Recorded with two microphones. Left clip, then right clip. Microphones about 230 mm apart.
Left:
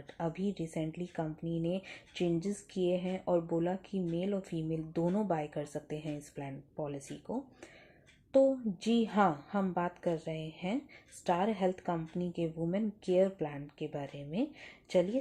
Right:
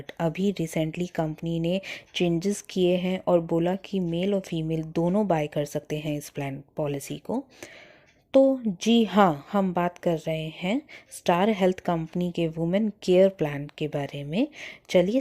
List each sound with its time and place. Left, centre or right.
0.1 s speech: right